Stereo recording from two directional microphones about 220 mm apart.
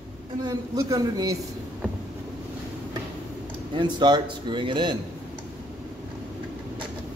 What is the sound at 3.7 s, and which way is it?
A man's voice, 20° right (ahead or behind).